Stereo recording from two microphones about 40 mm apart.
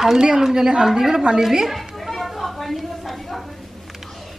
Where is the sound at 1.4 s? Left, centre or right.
Centre.